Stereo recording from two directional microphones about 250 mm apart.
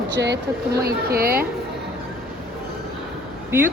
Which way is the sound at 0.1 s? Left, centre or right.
Right.